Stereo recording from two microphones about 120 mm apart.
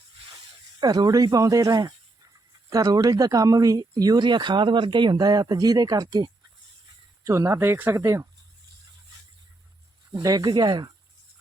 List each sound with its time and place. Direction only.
0.8 s speech: 30° right (ahead or behind)
7.3 s speech: 25° right (ahead or behind)
10.1 s speech: 35° right (ahead or behind)